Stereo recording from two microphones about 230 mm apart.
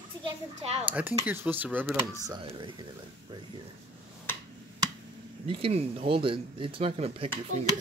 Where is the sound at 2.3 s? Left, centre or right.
Right.